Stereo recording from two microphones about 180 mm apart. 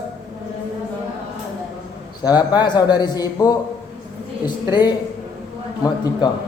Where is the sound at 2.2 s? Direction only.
20° left (ahead or behind).